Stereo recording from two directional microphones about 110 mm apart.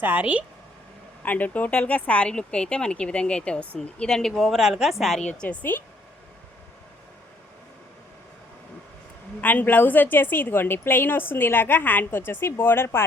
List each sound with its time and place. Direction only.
0.0 s a woman's voice: 15° right (ahead or behind)
1.2 s a woman's voice: 15° left (ahead or behind)
5.3 s speech: 10° left (ahead or behind)
9.4 s a woman's voice: 15° left (ahead or behind)